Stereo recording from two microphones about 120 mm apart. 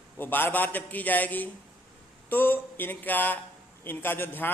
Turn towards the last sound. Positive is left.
turn(degrees=15)  # may be behind; listen again after turning